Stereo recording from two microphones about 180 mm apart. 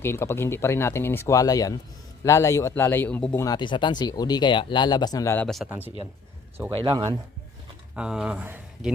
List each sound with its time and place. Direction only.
0.0 s speech: 15° left (ahead or behind)
3.4 s speech: 25° left (ahead or behind)
5.6 s speech: 10° right (ahead or behind)
6.7 s speech: 30° right (ahead or behind)
7.9 s speech: 5° right (ahead or behind)